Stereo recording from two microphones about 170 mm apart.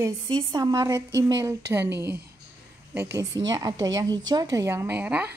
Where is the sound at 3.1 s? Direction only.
20° right (ahead or behind).